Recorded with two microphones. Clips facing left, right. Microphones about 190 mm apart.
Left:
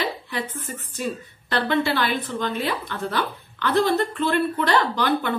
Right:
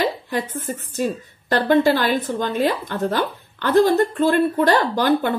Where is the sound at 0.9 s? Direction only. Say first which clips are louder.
Right 5 dB; 45° right (ahead or behind).